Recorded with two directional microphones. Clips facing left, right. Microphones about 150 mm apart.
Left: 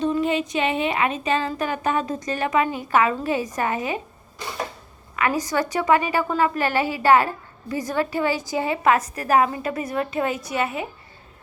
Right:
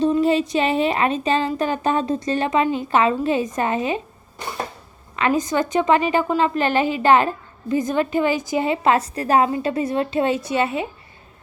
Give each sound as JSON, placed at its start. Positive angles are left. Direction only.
{"t": 0.0, "sound": "a woman's voice", "side_deg": -35}
{"t": 5.1, "sound": "a woman's voice", "side_deg": -25}